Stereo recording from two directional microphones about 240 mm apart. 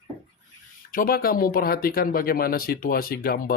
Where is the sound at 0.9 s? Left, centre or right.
Left.